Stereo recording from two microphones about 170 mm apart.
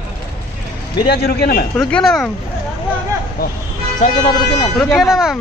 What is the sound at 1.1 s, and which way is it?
Speech, 70° left (ahead or behind).